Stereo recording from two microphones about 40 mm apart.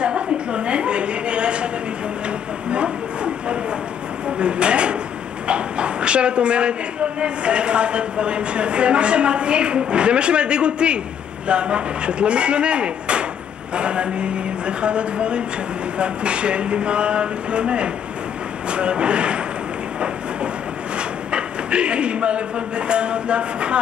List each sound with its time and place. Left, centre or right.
0.0 s a sound: right
4.4 s speech: right
5.5 s dog: right
7.2 s speech: right
21.3 s speech: right